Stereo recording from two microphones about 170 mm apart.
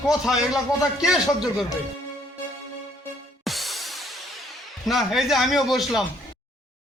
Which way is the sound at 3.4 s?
Centre (ahead or behind).